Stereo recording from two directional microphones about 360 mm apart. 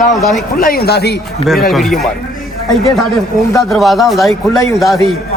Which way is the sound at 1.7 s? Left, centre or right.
Centre.